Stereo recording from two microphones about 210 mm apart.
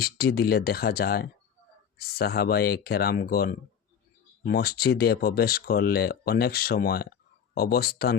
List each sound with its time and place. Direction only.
0.0 s speech: 50° left (ahead or behind)